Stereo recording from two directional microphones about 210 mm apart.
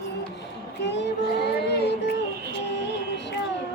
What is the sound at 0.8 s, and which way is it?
Child singing, 55° left (ahead or behind).